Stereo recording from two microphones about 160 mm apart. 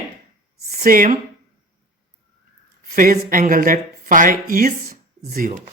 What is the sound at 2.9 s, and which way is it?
Speech, 65° right (ahead or behind).